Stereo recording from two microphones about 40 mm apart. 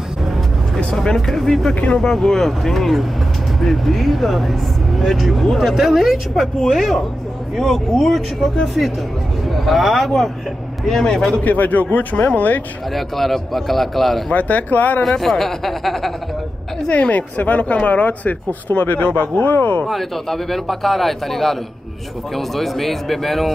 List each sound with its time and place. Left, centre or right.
0.9 s a man's voice: centre
11.4 s speech: left
12.9 s speech: centre
14.3 s speech: left
15.0 s speech: centre
16.8 s speech: left
19.9 s speech: centre
22.6 s speech: centre